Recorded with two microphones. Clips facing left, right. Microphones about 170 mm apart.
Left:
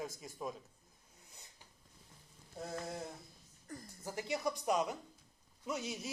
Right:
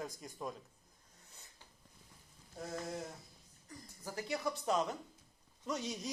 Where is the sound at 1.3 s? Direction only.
15° left (ahead or behind).